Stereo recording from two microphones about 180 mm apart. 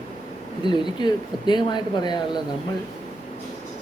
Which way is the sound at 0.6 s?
25° left (ahead or behind).